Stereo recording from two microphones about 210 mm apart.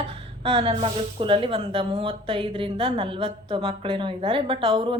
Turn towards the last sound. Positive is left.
turn(degrees=-25)  # may be behind; listen again after turning